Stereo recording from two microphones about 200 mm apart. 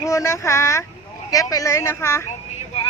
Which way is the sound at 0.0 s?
15° left (ahead or behind).